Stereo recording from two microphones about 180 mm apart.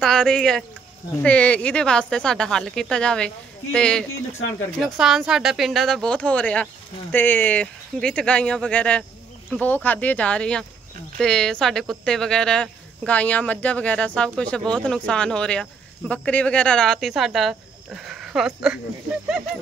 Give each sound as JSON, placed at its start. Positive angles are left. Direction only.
{"t": 0.0, "sound": "speech", "side_deg": 5}